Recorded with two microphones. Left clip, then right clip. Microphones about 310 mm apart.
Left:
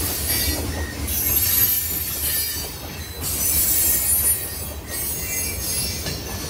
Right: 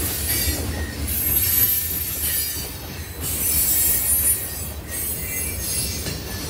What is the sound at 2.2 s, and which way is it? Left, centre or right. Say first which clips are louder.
Train: left 1 dB; left.